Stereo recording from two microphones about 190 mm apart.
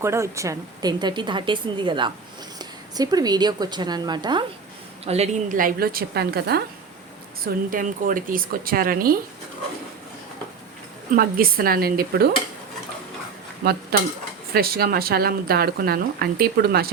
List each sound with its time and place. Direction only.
0.0 s a woman's voice: 15° right (ahead or behind)
5.0 s speech: 35° right (ahead or behind); by 9.1 s 50° right (ahead or behind)
11.1 s speech: 50° right (ahead or behind)
13.9 s speech: 50° right (ahead or behind)